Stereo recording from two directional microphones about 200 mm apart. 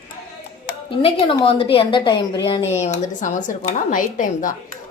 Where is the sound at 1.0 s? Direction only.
25° left (ahead or behind).